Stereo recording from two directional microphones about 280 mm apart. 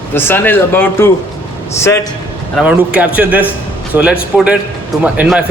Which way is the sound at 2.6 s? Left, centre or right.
Centre.